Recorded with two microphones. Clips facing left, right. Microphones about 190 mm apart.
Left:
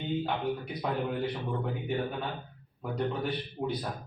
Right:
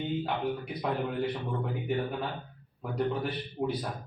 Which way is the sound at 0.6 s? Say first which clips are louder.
Even; 5° right (ahead or behind).